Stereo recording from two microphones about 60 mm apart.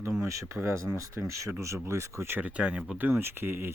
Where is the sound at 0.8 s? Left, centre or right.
Right.